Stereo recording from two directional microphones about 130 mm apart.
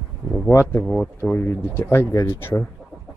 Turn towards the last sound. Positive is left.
turn(degrees=20)  # may be behind; listen again after turning